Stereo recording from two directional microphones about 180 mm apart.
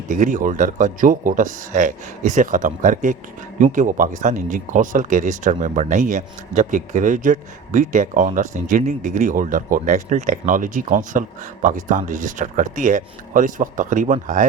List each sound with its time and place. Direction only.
0.1 s speech: 45° right (ahead or behind)